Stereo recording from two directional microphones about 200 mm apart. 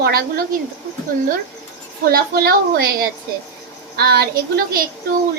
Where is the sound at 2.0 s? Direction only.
50° right (ahead or behind).